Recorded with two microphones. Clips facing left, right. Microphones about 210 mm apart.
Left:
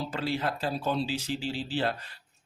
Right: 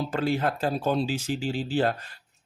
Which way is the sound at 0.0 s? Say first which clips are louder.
Right 5 dB; 50° right (ahead or behind).